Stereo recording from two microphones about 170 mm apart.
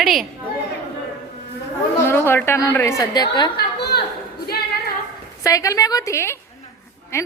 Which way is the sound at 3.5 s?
75° left (ahead or behind).